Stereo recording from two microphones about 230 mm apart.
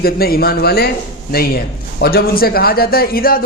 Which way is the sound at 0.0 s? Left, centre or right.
Left.